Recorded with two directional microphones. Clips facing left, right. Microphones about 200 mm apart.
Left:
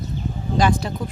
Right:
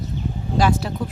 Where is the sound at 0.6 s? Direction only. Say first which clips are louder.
Even; 5° right (ahead or behind).